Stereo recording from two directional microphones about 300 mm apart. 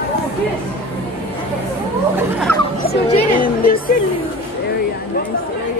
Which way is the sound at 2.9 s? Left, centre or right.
Left.